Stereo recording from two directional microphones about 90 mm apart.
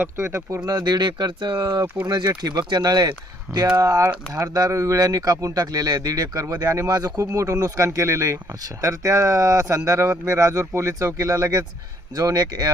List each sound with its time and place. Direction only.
0.0 s speech: 30° right (ahead or behind)
0.6 s speech: 45° right (ahead or behind)